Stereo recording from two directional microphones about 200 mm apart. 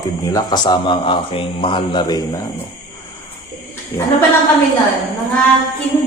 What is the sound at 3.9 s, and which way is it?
Speech, 15° left (ahead or behind).